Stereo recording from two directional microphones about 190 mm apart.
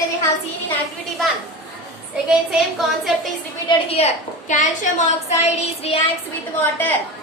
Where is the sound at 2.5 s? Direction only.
Centre (ahead or behind).